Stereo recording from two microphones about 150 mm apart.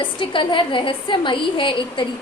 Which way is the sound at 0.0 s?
35° left (ahead or behind).